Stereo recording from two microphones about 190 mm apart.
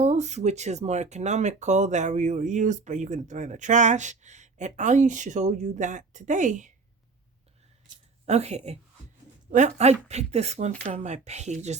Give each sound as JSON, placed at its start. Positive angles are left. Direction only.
{"t": 0.0, "sound": "speech", "side_deg": -35}
{"t": 8.3, "sound": "speech", "side_deg": -35}